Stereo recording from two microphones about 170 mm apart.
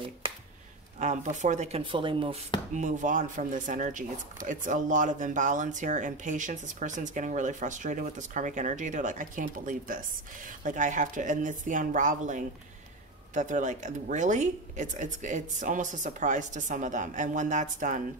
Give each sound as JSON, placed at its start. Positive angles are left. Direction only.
{"t": 0.9, "sound": "speech", "side_deg": -45}
{"t": 1.8, "sound": "speech", "side_deg": -30}
{"t": 2.7, "sound": "speech", "side_deg": -50}